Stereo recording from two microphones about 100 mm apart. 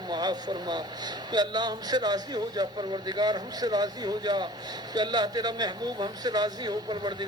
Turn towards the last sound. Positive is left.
turn(degrees=-45)  # may be behind; listen again after turning